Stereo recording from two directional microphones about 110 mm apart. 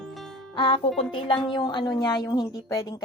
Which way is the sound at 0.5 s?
45° left (ahead or behind).